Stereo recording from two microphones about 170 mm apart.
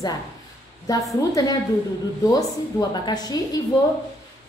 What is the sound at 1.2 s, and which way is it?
A woman's voice, 20° left (ahead or behind).